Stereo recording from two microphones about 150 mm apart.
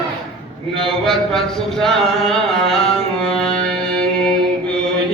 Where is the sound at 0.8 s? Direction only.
5° left (ahead or behind).